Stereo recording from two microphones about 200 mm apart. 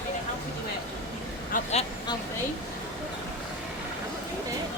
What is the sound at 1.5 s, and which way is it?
Vehicle, 35° left (ahead or behind).